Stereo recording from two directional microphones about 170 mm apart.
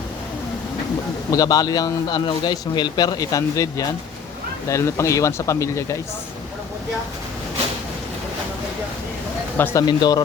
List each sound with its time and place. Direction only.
1.3 s a man's voice: 20° left (ahead or behind)
9.6 s speech: 10° left (ahead or behind)
9.8 s a man's voice: 25° left (ahead or behind)